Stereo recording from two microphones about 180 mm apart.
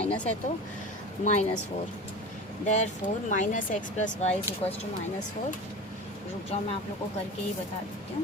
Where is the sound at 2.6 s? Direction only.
40° left (ahead or behind).